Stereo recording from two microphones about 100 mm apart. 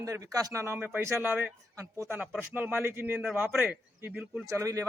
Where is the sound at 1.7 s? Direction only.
30° right (ahead or behind).